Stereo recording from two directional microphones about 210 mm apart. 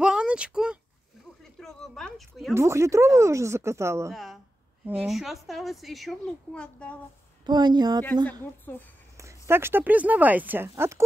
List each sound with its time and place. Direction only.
0.0 s a sound: 5° right (ahead or behind)
2.5 s speech: 15° right (ahead or behind)
4.1 s a sound: centre (ahead or behind)
4.8 s a woman's voice: 5° right (ahead or behind)
7.4 s a woman's voice: 20° right (ahead or behind)
8.3 s speech: 10° left (ahead or behind)
9.1 s speech: 15° right (ahead or behind)